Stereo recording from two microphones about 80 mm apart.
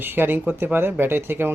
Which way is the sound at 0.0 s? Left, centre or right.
Right.